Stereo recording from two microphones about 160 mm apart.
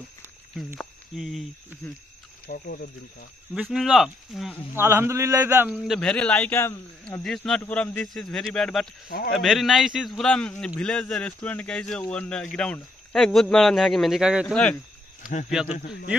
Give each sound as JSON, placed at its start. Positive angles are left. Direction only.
{"t": 0.7, "sound": "speech", "side_deg": 0}
{"t": 2.4, "sound": "speech", "side_deg": 65}
{"t": 3.6, "sound": "a man's voice", "side_deg": 0}
{"t": 4.7, "sound": "speech", "side_deg": -15}
{"t": 5.8, "sound": "a man's voice", "side_deg": 0}
{"t": 14.5, "sound": "a man's voice", "side_deg": 5}